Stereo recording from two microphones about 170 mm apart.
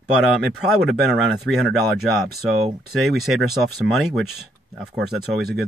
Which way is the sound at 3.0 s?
Centre (ahead or behind).